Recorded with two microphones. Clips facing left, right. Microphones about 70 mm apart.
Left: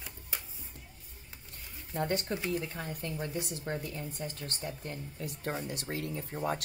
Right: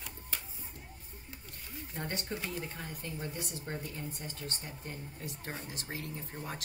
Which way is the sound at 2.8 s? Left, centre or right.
Left.